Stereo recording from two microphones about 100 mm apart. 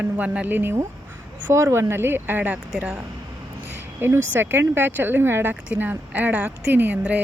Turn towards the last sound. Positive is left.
turn(degrees=-15)  # may be behind; listen again after turning